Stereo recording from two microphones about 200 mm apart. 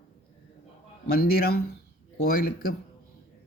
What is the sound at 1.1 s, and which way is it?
Speech, 50° left (ahead or behind).